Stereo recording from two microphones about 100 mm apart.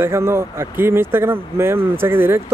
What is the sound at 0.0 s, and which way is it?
Speech, 25° right (ahead or behind).